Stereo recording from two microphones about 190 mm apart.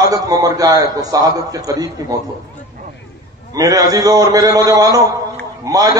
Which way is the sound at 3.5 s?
20° right (ahead or behind).